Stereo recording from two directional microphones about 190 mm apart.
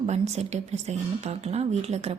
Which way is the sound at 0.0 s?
35° right (ahead or behind).